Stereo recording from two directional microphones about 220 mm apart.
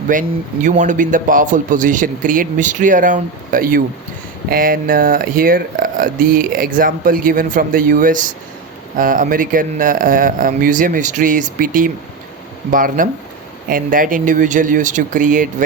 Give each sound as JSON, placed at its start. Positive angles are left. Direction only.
{"t": 0.1, "sound": "speech", "side_deg": -35}